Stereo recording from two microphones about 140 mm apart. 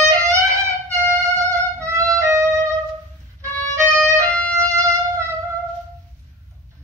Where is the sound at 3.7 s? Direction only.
20° right (ahead or behind).